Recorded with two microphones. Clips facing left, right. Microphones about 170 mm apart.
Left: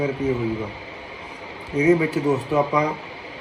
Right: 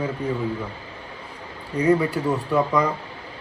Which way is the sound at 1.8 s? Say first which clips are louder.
Left 2 dB; 10° left (ahead or behind).